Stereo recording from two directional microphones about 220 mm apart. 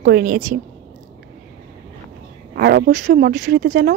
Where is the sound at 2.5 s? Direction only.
45° right (ahead or behind).